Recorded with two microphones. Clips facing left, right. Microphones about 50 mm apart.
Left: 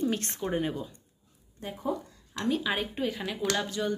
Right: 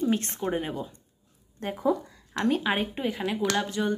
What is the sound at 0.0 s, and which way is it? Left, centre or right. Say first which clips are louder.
Speech: right 3 dB; right.